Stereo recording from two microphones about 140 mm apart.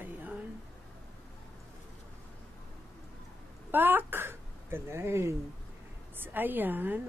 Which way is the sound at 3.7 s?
15° right (ahead or behind).